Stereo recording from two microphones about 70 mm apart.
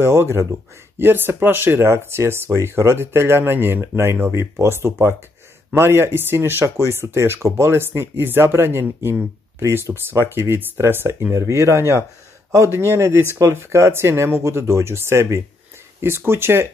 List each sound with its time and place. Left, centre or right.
0.0 s speech: right